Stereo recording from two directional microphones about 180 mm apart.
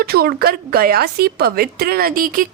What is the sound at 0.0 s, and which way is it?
A woman's voice, 60° right (ahead or behind).